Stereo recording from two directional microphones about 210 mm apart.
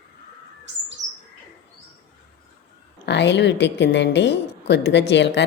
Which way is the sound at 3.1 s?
55° left (ahead or behind).